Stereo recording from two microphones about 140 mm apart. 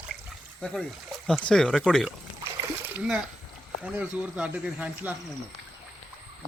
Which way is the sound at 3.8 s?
10° right (ahead or behind).